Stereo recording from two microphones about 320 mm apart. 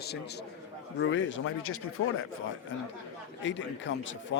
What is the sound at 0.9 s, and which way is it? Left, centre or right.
Speech, left.